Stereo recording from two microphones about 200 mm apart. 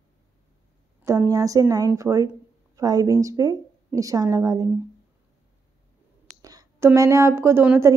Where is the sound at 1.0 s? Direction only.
15° right (ahead or behind).